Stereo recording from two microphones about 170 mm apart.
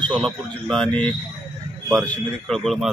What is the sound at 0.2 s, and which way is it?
A man's voice, 5° left (ahead or behind).